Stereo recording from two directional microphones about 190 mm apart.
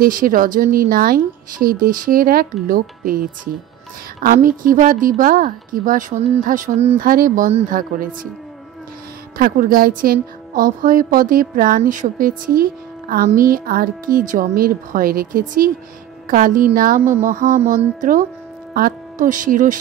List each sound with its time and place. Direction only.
0.0 s a woman's voice: 45° right (ahead or behind)
4.3 s a woman's voice: 45° right (ahead or behind)
9.4 s a woman's voice: 50° right (ahead or behind)